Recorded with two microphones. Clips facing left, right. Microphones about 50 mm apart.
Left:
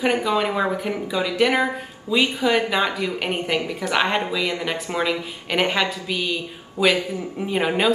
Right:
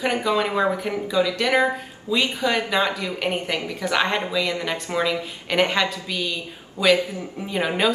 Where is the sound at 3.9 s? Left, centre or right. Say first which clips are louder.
Left 1 dB; centre.